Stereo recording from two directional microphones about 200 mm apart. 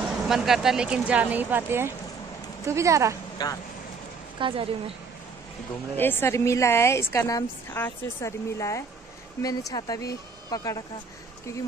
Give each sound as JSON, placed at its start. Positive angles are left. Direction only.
{"t": 0.3, "sound": "speech", "side_deg": 0}
{"t": 3.4, "sound": "speech", "side_deg": 20}
{"t": 4.4, "sound": "a woman's voice", "side_deg": -25}
{"t": 5.9, "sound": "speech", "side_deg": 10}